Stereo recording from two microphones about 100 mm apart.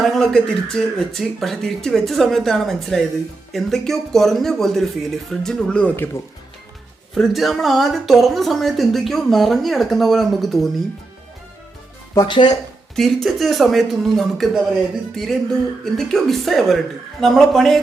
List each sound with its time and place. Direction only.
0.0 s a woman's voice: centre (ahead or behind)
7.1 s a woman's voice: centre (ahead or behind)
12.1 s speech: 45° left (ahead or behind)
13.0 s a woman's voice: centre (ahead or behind)